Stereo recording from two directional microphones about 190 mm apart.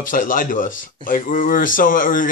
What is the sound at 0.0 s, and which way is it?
Speech, 45° left (ahead or behind).